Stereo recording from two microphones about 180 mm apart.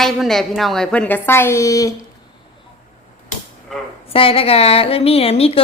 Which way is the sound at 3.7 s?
Centre (ahead or behind).